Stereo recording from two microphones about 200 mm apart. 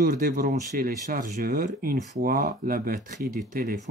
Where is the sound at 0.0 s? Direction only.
45° right (ahead or behind).